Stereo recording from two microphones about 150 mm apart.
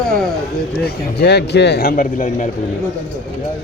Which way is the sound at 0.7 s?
90° left.